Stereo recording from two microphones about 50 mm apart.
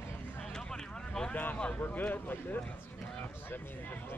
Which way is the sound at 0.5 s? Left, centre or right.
Centre.